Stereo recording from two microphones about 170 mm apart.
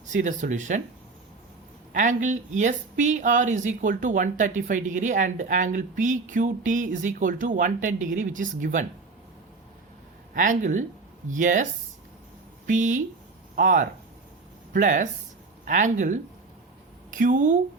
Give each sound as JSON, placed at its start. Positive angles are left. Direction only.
{"t": 0.1, "sound": "speech", "side_deg": -50}
{"t": 1.9, "sound": "speech", "side_deg": -50}
{"t": 10.3, "sound": "a woman's voice", "side_deg": -50}